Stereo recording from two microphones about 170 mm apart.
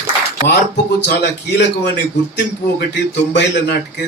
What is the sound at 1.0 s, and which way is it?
Speech, 75° left (ahead or behind).